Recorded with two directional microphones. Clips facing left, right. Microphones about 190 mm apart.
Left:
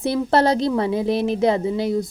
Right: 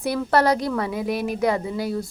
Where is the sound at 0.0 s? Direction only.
25° left (ahead or behind).